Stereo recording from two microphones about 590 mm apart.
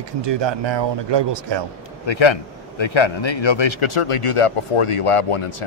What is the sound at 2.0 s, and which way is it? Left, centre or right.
Speech, left.